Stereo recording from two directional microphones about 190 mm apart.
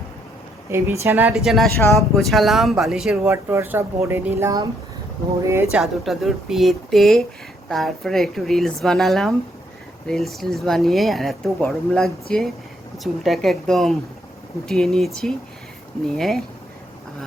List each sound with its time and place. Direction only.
0.7 s speech: 15° right (ahead or behind)
1.5 s speech: centre (ahead or behind)
3.2 s speech: 15° right (ahead or behind)
5.7 s speech: centre (ahead or behind)